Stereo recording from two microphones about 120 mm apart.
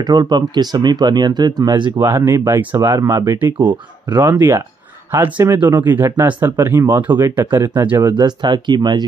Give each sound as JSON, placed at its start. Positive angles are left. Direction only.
{"t": 0.0, "sound": "speech", "side_deg": -35}
{"t": 4.3, "sound": "speech", "side_deg": -20}
{"t": 8.1, "sound": "speech", "side_deg": -40}